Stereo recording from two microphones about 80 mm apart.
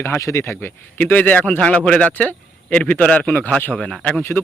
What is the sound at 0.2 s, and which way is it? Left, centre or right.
Speech, left.